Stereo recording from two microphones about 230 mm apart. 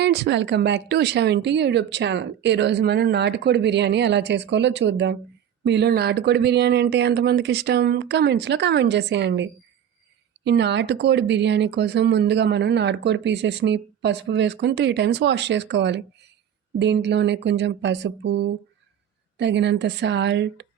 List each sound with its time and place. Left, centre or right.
0.0 s speech: right